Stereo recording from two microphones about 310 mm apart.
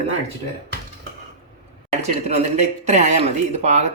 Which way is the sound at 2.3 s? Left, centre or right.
Right.